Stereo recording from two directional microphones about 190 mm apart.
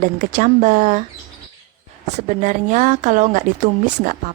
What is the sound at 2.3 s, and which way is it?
A woman's voice, 40° right (ahead or behind).